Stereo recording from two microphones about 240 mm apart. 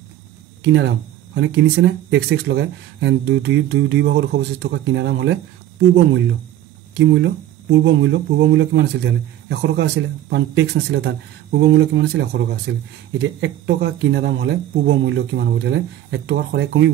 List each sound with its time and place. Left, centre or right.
0.7 s speech: right
6.9 s speech: right